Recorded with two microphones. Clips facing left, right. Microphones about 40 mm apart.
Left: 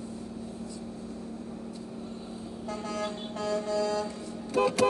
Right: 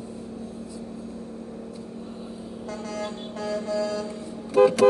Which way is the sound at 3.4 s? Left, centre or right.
Right.